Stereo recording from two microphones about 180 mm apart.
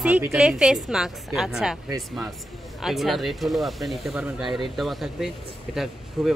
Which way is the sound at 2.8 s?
Centre (ahead or behind).